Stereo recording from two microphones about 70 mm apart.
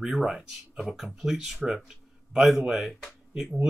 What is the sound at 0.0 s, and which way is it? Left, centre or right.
Speech, centre.